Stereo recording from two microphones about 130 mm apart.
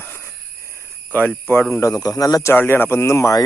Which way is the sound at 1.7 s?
25° left (ahead or behind).